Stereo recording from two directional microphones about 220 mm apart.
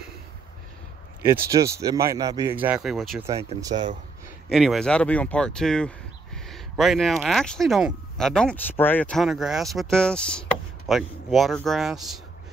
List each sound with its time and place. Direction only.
1.2 s speech: 15° right (ahead or behind)
3.6 s speech: 20° right (ahead or behind)
4.5 s speech: centre (ahead or behind)